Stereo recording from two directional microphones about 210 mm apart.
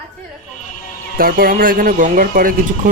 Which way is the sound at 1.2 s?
45° right (ahead or behind).